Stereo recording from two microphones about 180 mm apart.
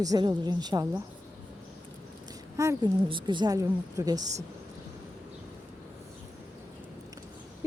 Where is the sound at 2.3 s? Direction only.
20° right (ahead or behind).